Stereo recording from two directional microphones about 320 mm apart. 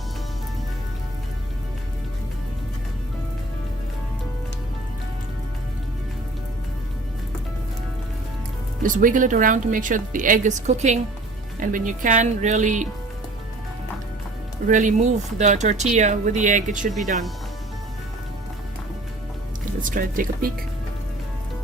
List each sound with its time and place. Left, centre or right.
8.8 s speech: right
14.7 s speech: right
19.8 s speech: right